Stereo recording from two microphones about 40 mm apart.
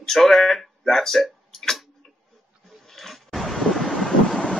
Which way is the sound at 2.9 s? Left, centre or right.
Centre.